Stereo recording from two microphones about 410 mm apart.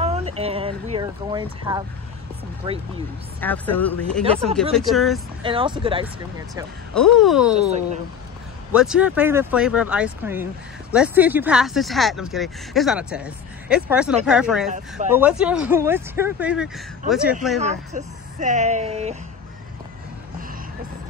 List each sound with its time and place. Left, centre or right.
0.0 s speech: centre
3.3 s speech: centre
5.4 s speech: centre
7.2 s speech: centre
7.5 s speech: centre
8.7 s speech: centre
17.6 s speech: centre